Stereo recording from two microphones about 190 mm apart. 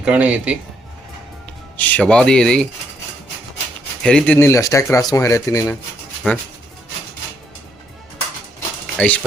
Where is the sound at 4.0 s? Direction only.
5° left (ahead or behind).